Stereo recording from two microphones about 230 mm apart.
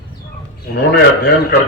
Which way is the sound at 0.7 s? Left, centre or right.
Left.